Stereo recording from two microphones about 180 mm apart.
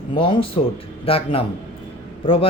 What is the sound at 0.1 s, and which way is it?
Speech, 30° left (ahead or behind).